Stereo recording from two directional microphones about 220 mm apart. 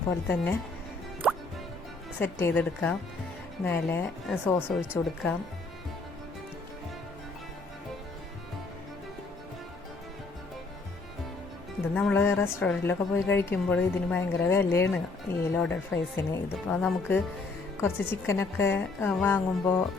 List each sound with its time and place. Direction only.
2.1 s a woman's voice: 10° left (ahead or behind)
11.9 s a woman's voice: 10° left (ahead or behind)